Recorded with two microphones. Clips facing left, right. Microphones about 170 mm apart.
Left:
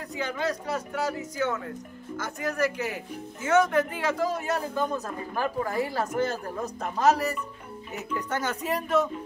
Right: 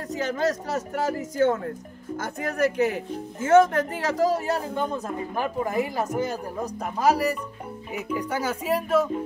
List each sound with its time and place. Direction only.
0.1 s speech: 40° right (ahead or behind); by 9.1 s 5° right (ahead or behind)